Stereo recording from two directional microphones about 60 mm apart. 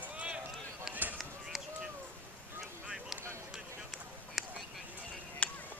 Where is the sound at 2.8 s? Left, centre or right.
Centre.